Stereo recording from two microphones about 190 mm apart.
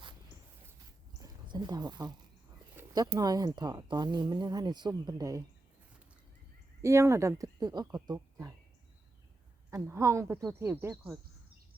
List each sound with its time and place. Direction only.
1.2 s a sound: 20° right (ahead or behind)
2.7 s speech: 15° right (ahead or behind)
6.8 s speech: 15° right (ahead or behind)
9.6 s speech: 15° right (ahead or behind)